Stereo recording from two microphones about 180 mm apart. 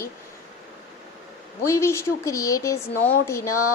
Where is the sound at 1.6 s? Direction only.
15° left (ahead or behind).